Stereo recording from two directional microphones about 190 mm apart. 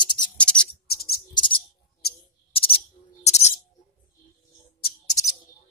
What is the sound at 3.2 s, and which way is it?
Music, 35° left (ahead or behind).